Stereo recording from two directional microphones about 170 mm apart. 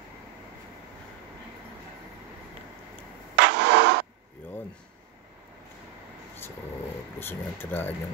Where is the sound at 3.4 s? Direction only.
80° right.